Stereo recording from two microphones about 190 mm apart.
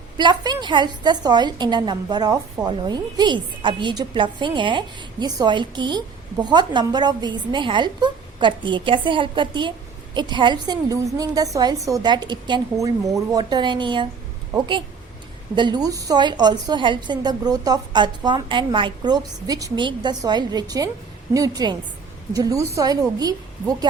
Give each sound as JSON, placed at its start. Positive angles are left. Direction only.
{"t": 0.2, "sound": "a woman's voice", "side_deg": -25}
{"t": 15.5, "sound": "a woman's voice", "side_deg": -25}